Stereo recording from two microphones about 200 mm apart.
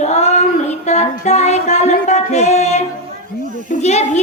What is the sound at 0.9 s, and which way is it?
Music, 35° left (ahead or behind).